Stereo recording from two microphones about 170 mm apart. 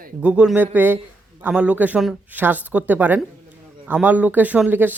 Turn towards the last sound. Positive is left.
turn(degrees=-10)  # may be behind; listen again after turning